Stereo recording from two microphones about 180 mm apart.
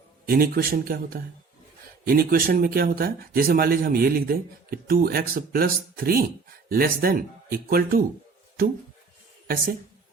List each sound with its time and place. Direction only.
0.3 s speech: 55° right (ahead or behind)